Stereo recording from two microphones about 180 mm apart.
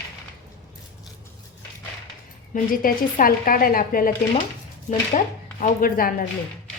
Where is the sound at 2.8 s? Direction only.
50° left (ahead or behind).